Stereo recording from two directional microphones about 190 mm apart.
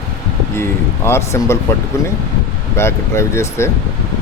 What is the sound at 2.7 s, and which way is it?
Speech, 15° left (ahead or behind).